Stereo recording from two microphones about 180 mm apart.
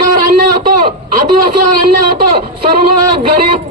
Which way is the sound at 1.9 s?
55° right (ahead or behind).